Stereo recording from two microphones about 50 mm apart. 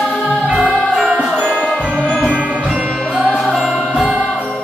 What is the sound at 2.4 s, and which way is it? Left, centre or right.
Jingle bell, right.